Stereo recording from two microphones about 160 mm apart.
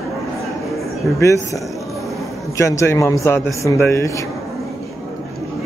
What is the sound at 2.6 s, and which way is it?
A man's voice, 20° left (ahead or behind).